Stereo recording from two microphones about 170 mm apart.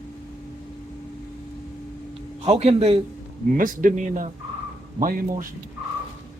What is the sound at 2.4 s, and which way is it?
Speech, 40° right (ahead or behind).